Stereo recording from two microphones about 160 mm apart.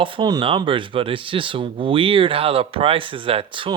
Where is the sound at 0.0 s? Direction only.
30° right (ahead or behind).